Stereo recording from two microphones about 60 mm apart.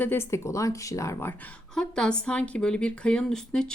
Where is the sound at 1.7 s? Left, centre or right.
Centre.